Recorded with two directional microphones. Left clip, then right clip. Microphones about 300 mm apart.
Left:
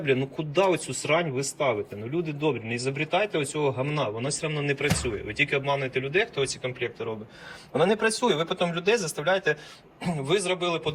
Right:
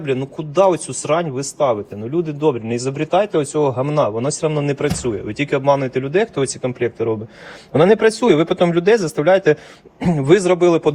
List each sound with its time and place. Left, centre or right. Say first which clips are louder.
0.0 s a man's voice: right 4 dB; centre
7.7 s speech: right 10 dB; right